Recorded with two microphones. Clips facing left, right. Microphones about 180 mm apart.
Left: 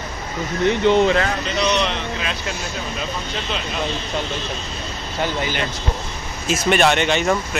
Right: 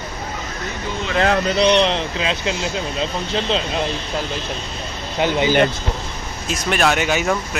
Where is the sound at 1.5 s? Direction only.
30° right (ahead or behind).